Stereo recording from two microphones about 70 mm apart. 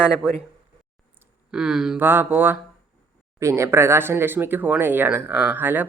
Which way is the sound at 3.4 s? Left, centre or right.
Right.